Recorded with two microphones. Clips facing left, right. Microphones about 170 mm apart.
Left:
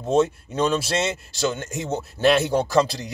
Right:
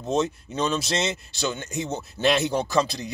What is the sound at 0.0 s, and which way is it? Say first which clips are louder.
A man's voice: left 5 dB; 10° left (ahead or behind).